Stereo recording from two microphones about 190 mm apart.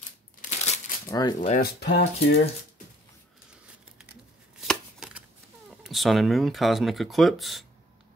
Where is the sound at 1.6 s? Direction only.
60° left (ahead or behind).